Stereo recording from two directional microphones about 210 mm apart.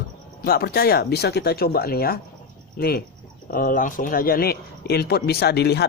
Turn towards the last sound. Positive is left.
turn(degrees=50)  # may be behind; listen again after turning